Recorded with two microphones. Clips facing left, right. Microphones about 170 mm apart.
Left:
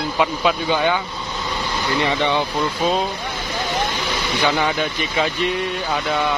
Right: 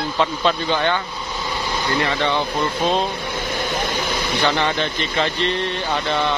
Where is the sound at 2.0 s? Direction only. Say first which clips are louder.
Left 2 dB; 15° left (ahead or behind).